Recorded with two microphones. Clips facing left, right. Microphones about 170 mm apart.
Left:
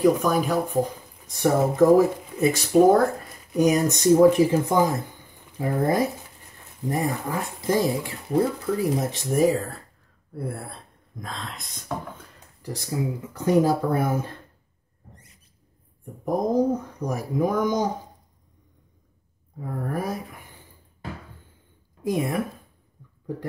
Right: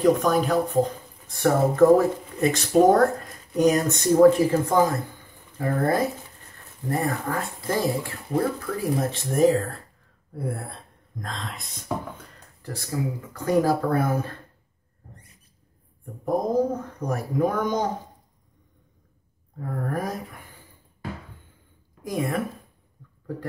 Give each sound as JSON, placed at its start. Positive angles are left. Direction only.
{"t": 0.0, "sound": "speech", "side_deg": 5}
{"t": 9.4, "sound": "speech", "side_deg": 5}
{"t": 12.6, "sound": "speech", "side_deg": 20}
{"t": 16.3, "sound": "speech", "side_deg": 15}
{"t": 19.6, "sound": "speech", "side_deg": 5}
{"t": 22.0, "sound": "speech", "side_deg": 20}